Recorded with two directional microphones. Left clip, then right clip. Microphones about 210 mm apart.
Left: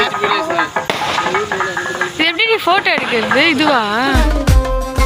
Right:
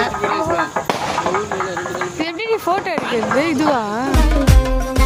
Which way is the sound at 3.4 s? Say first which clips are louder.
Left 6 dB; 10° right (ahead or behind).